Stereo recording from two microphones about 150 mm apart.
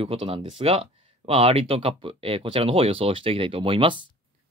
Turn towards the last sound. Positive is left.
turn(degrees=-35)  # may be behind; listen again after turning